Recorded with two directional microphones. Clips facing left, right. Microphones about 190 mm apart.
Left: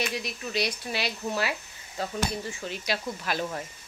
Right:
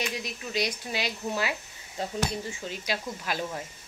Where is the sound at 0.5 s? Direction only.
15° right (ahead or behind).